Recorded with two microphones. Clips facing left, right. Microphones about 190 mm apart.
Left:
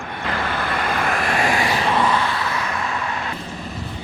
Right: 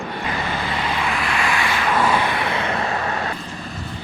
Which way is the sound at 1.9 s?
10° right (ahead or behind).